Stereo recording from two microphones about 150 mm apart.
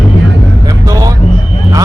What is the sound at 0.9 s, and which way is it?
Speech, 25° right (ahead or behind).